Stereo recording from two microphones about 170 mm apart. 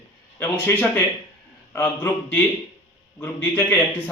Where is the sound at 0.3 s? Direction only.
15° left (ahead or behind).